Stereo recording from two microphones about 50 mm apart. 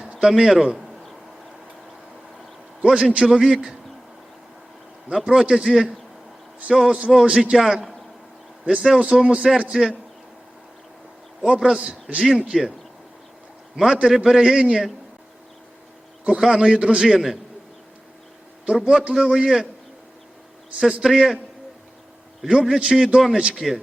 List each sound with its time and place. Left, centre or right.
0.2 s a man's voice: centre
2.8 s a man's voice: centre
3.2 s a man's voice: centre
5.2 s a man's voice: centre
11.4 s a man's voice: centre
13.7 s a man's voice: centre
16.2 s a man's voice: centre
17.0 s a man's voice: centre
18.8 s a man's voice: centre
21.0 s a man's voice: centre
22.4 s a man's voice: centre